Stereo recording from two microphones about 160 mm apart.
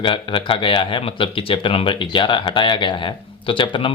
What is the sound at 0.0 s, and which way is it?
Speech, 30° left (ahead or behind).